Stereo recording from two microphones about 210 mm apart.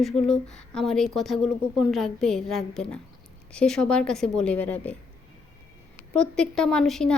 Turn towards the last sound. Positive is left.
turn(degrees=0)  # may be behind; listen again after turning